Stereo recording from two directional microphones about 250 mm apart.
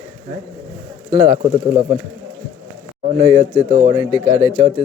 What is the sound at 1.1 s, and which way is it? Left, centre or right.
Speech, centre.